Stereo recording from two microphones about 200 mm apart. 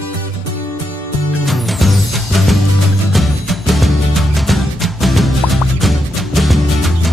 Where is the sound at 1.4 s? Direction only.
Centre (ahead or behind).